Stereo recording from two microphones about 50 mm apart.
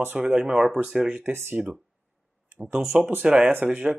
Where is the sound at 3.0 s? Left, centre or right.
Right.